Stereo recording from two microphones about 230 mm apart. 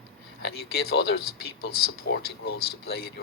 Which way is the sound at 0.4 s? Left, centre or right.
Left.